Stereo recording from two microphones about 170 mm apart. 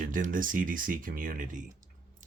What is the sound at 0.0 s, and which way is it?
Speech, 50° right (ahead or behind).